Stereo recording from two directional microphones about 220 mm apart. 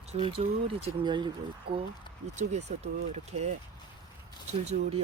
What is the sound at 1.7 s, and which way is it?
Speech, 45° right (ahead or behind).